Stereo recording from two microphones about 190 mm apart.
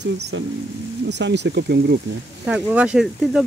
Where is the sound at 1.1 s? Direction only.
65° right (ahead or behind).